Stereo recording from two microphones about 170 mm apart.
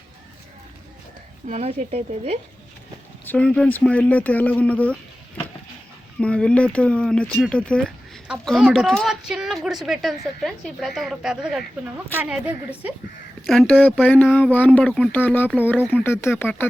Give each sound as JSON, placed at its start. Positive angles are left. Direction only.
{"t": 1.5, "sound": "speech", "side_deg": -40}
{"t": 3.2, "sound": "speech", "side_deg": 5}
{"t": 6.1, "sound": "a woman's voice", "side_deg": 5}
{"t": 13.5, "sound": "speech", "side_deg": 5}